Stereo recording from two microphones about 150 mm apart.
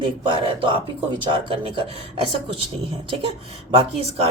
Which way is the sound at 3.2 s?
35° right (ahead or behind).